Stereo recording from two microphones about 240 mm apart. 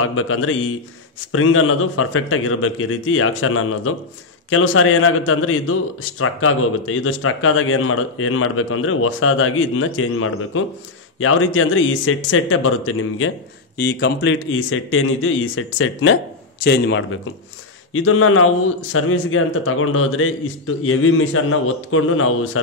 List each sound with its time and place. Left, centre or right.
0.0 s a man's voice: left
13.7 s a man's voice: left
16.6 s a man's voice: left